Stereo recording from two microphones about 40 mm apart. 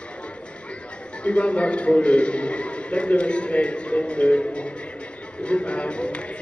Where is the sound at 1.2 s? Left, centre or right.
Left.